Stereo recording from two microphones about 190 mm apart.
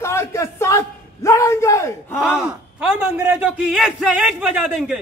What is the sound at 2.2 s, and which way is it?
A man's voice, 5° right (ahead or behind).